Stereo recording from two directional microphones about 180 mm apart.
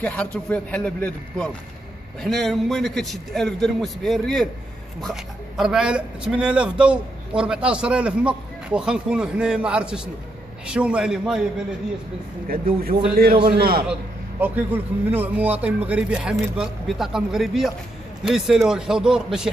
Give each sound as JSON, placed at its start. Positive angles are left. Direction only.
{"t": 0.0, "sound": "a man's voice", "side_deg": 10}
{"t": 12.4, "sound": "a man's voice", "side_deg": -55}
{"t": 14.4, "sound": "a man's voice", "side_deg": -10}